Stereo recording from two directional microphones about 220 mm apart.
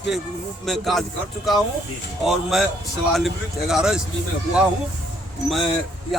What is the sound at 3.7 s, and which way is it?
Speech, 5° right (ahead or behind).